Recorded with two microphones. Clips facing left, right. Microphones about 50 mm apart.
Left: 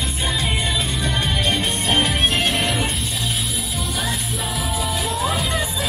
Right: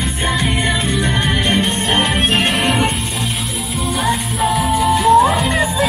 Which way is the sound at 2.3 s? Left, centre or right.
Right.